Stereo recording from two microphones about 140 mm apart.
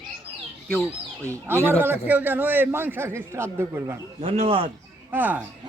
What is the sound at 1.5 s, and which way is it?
A man's voice, 15° right (ahead or behind).